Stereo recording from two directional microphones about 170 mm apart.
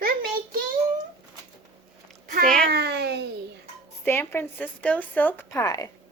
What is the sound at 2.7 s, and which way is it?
Speech, 75° right (ahead or behind).